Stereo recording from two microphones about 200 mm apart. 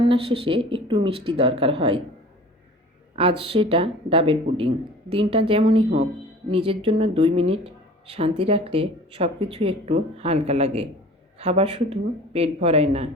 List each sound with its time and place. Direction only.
0.1 s speech: 25° right (ahead or behind)
3.2 s speech: 25° right (ahead or behind)